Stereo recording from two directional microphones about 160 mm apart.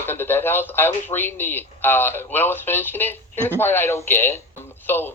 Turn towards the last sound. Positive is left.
turn(degrees=15)  # may be behind; listen again after turning